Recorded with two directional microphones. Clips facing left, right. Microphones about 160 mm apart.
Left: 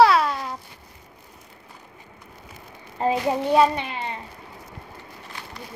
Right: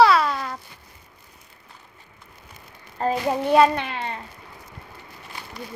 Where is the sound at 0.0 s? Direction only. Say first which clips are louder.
Even; 10° left (ahead or behind).